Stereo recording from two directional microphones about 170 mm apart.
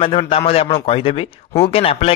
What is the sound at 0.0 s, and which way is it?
A man's voice, 30° left (ahead or behind).